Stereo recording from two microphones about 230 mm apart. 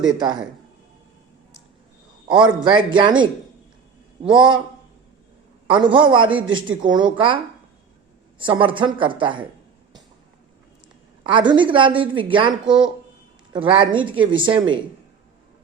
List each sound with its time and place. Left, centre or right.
0.0 s a woman's voice: centre
2.2 s a woman's voice: centre
5.7 s a woman's voice: right
11.3 s a woman's voice: right
12.6 s speech: centre
13.5 s a woman's voice: right